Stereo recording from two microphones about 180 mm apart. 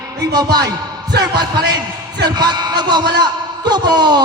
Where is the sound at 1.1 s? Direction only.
65° right (ahead or behind).